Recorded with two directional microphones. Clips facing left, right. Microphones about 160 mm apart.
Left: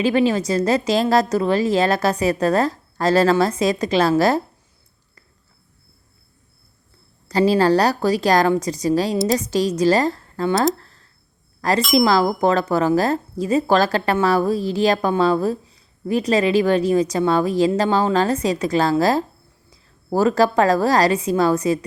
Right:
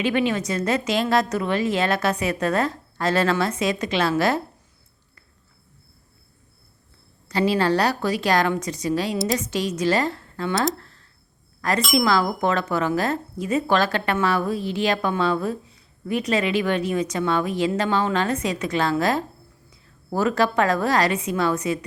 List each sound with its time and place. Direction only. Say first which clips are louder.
0.0 s speech: left 4 dB; 35° left (ahead or behind)
7.3 s speech: left 5 dB; 40° left (ahead or behind)
10.8 s a sound: right 1 dB; 35° left (ahead or behind)
11.6 s speech: left 4 dB; 35° left (ahead or behind)